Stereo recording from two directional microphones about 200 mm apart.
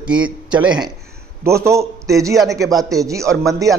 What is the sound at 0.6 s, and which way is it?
A man's voice, 5° right (ahead or behind).